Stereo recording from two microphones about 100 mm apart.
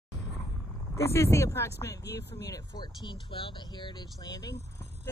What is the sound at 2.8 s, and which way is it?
Speech, 50° left (ahead or behind).